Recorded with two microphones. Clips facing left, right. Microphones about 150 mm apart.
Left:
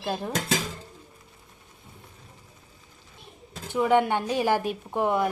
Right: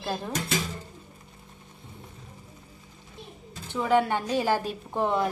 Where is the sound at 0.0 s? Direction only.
15° left (ahead or behind).